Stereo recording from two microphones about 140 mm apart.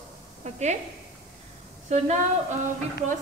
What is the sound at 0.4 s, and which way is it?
Speech, 55° right (ahead or behind).